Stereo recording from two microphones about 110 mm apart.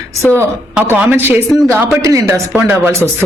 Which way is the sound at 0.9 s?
15° right (ahead or behind).